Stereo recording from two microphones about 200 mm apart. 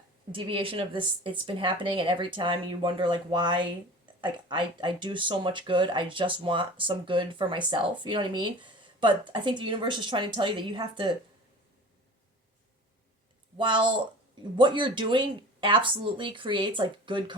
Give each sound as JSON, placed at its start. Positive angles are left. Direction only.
{"t": 0.3, "sound": "speech", "side_deg": -25}
{"t": 13.6, "sound": "speech", "side_deg": -25}